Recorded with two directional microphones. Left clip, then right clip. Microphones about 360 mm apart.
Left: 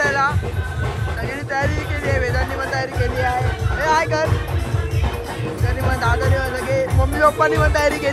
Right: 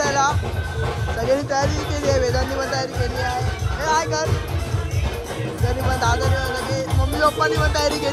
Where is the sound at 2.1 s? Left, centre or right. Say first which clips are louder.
Left 1 dB; centre.